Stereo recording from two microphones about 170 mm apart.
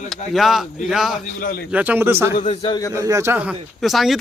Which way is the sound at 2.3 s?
45° left (ahead or behind).